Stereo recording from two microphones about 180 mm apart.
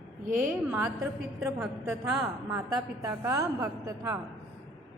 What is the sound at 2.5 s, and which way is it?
A woman's voice, 20° right (ahead or behind).